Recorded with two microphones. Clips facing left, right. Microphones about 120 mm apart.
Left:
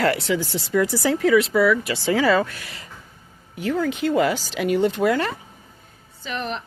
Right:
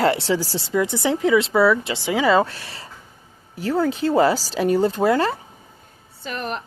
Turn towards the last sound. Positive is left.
turn(degrees=-45)  # may be behind; listen again after turning